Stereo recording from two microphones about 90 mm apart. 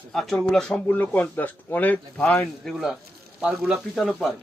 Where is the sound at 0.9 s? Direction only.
20° left (ahead or behind).